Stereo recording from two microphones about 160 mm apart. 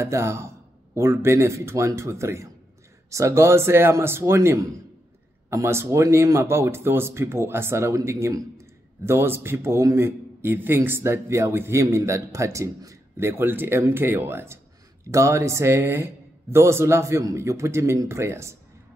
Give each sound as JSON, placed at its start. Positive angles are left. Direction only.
{"t": 0.0, "sound": "speech", "side_deg": -15}